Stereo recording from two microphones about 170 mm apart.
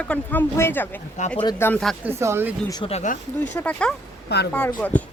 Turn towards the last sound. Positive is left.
turn(degrees=15)  # may be behind; listen again after turning